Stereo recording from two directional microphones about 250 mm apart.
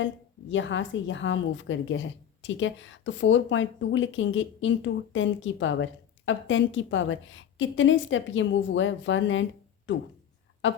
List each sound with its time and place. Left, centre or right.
0.5 s a woman's voice: left